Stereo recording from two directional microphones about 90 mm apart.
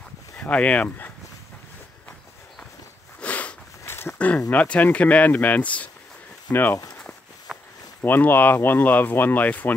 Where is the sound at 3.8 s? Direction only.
30° left (ahead or behind).